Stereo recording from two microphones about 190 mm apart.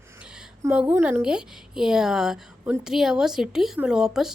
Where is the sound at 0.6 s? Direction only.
5° right (ahead or behind).